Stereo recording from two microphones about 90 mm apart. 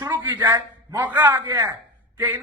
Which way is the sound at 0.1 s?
25° right (ahead or behind).